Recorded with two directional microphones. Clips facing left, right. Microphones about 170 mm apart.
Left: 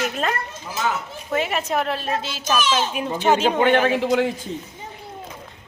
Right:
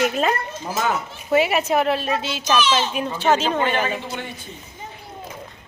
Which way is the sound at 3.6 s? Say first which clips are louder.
Left 5 dB; 60° left (ahead or behind).